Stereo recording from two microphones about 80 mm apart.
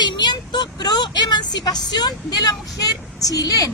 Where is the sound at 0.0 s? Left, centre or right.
Left.